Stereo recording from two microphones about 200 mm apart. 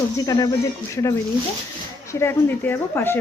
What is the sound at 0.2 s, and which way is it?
Speech, 15° left (ahead or behind).